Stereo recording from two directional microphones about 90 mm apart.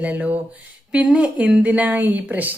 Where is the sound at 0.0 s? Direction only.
15° right (ahead or behind).